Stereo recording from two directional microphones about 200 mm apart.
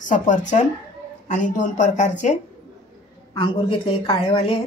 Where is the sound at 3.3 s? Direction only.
25° left (ahead or behind).